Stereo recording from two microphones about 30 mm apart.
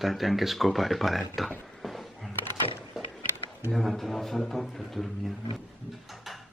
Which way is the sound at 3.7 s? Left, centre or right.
Centre.